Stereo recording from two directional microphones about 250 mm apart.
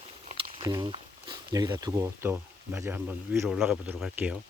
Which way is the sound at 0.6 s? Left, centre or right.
Centre.